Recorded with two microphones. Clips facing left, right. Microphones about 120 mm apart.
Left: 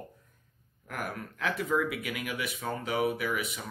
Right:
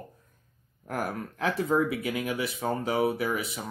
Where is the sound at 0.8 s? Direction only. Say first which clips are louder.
Right 5 dB; 35° right (ahead or behind).